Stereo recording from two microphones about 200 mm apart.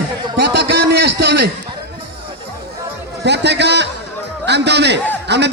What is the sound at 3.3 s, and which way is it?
A man's voice, 60° right (ahead or behind).